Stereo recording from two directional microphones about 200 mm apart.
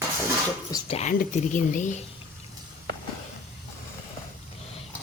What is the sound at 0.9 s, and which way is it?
A woman's voice, 30° left (ahead or behind).